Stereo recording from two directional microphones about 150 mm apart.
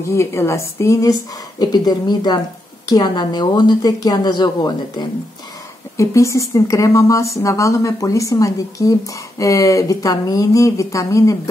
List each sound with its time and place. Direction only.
0.1 s a woman's voice: 20° left (ahead or behind)